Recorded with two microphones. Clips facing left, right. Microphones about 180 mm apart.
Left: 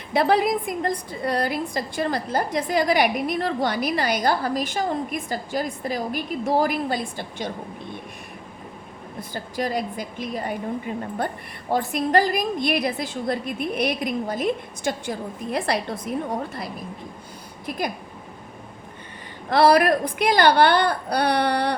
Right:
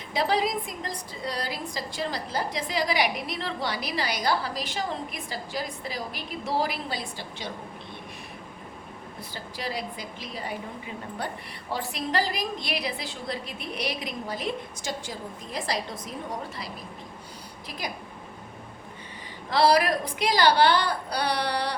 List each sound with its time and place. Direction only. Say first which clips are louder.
0.1 s a woman's voice: left 6 dB; 55° left (ahead or behind)
9.3 s a woman's voice: left 8 dB; 50° left (ahead or behind)
17.7 s a woman's voice: left 8 dB; 55° left (ahead or behind)
19.5 s a woman's voice: left 5 dB; 55° left (ahead or behind)